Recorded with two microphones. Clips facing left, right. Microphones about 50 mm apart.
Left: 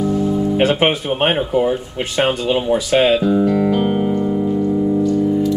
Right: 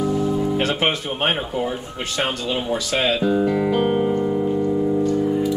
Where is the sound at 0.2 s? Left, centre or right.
Right.